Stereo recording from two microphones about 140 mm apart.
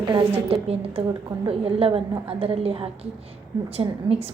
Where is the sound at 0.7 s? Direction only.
45° right (ahead or behind).